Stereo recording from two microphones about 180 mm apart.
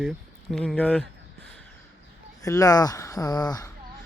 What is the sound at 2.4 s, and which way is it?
Speech, 20° left (ahead or behind).